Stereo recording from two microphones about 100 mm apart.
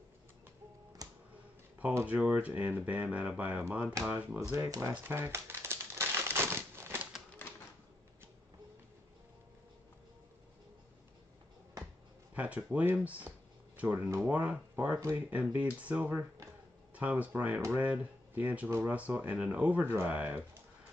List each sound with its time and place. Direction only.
1.0 s music: 40° right (ahead or behind)
2.0 s speech: 15° right (ahead or behind)
4.4 s speech: 30° right (ahead or behind)
4.9 s crumpling: 20° right (ahead or behind)
12.4 s speech: 15° right (ahead or behind)
13.9 s speech: 25° right (ahead or behind)
14.3 s speech: 15° right (ahead or behind)
15.0 s speech: 30° right (ahead or behind)
15.2 s speech: 15° right (ahead or behind)